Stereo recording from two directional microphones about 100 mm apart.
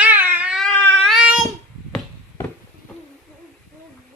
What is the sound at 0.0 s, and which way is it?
Cat, 15° right (ahead or behind).